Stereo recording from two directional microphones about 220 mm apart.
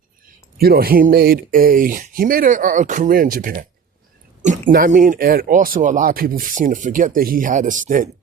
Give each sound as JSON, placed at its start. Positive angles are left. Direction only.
{"t": 0.6, "sound": "speech", "side_deg": -45}
{"t": 4.7, "sound": "speech", "side_deg": -40}